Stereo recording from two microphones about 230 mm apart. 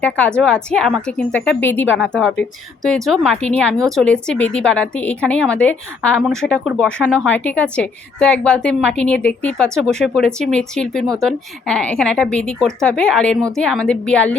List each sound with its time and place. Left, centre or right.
0.0 s a woman's voice: centre